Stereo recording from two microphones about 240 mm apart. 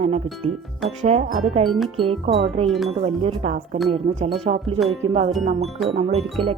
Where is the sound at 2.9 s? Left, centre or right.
Right.